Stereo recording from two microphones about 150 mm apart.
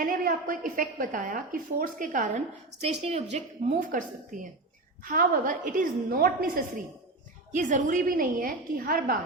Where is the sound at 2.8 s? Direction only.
45° right (ahead or behind); by 6.8 s 70° right (ahead or behind).